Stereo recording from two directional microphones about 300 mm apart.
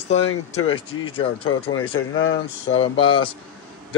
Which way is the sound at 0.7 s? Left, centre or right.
Centre.